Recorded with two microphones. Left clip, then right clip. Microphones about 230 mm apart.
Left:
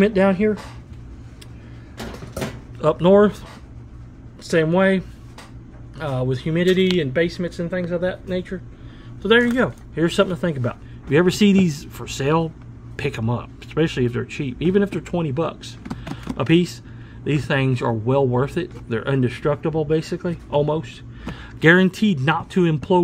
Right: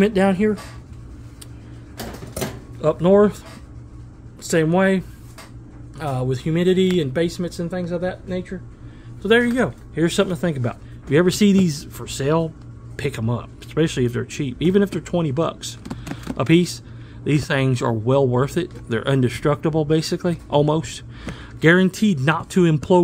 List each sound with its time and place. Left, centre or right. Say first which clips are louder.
0.0 s speech: left 1 dB; centre
2.8 s speech: left 1 dB; centre
4.4 s speech: even; centre
21.3 s speech: left 1 dB; centre